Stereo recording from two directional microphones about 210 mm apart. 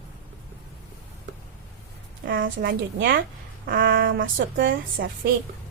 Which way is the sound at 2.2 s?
40° right (ahead or behind).